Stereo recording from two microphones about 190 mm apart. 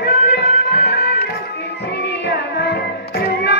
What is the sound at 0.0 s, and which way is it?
Music, 65° left (ahead or behind).